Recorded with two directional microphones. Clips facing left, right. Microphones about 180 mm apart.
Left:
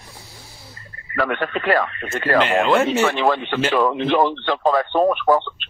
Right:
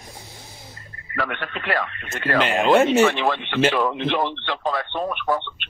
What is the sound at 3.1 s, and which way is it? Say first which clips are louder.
A man's voice: left 3 dB; 40° left (ahead or behind).